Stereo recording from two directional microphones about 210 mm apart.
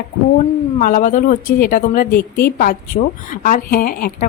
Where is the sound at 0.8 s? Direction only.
40° left (ahead or behind).